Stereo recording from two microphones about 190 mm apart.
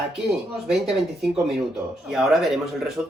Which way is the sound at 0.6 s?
Centre (ahead or behind).